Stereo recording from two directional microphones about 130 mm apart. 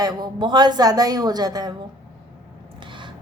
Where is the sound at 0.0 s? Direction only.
30° right (ahead or behind).